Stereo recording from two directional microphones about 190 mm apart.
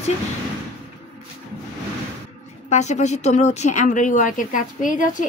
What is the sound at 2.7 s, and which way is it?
A woman's voice, 35° left (ahead or behind).